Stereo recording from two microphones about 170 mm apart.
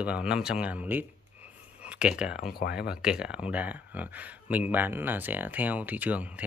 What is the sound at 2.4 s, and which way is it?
Speech, 65° left (ahead or behind).